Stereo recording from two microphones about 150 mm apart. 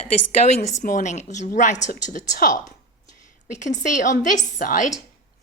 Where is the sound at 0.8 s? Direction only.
65° left (ahead or behind).